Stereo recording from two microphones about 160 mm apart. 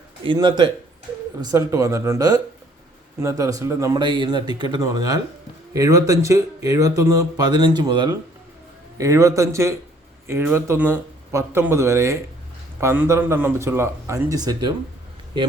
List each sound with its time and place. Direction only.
0.3 s speech: 30° right (ahead or behind)